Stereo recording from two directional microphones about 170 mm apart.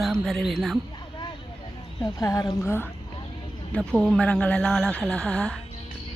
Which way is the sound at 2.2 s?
20° left (ahead or behind).